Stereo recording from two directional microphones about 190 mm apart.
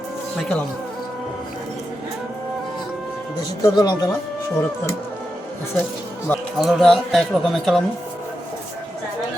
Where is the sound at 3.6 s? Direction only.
25° left (ahead or behind).